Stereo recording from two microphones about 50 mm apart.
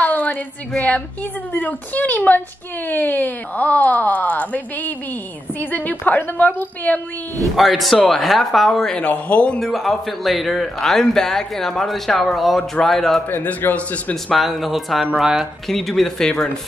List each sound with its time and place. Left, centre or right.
0.0 s a sound: left
0.7 s speech: left
7.5 s a man's voice: centre
8.9 s speech: left
9.6 s a man's voice: centre
13.6 s a man's voice: left
14.3 s a man's voice: centre
15.7 s speech: centre